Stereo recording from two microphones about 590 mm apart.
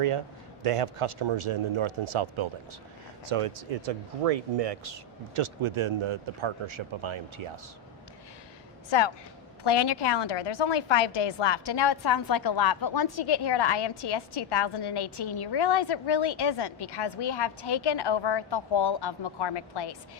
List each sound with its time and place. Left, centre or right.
0.6 s speech: right
8.9 s a woman's voice: left